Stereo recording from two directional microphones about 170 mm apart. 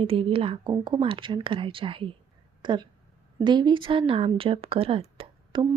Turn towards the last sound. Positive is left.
turn(degrees=-30)  # may be behind; listen again after turning